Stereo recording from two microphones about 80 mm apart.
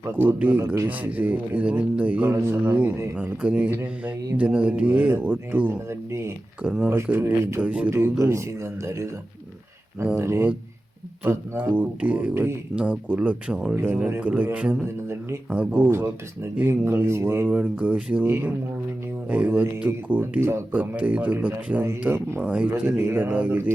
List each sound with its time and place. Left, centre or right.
0.2 s speech: right
0.6 s speech: right
0.9 s speech: centre
5.9 s speech: right
6.6 s speech: centre
7.9 s speech: right
10.2 s speech: right
11.2 s speech: centre
12.3 s speech: right
12.7 s speech: centre
13.8 s speech: right
15.9 s speech: right
17.5 s speech: centre
22.9 s speech: right